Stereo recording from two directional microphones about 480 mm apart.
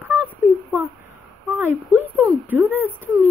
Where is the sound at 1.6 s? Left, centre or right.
Centre.